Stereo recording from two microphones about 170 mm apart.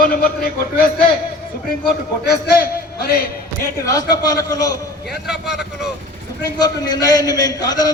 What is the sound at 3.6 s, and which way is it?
A man's voice, 20° left (ahead or behind).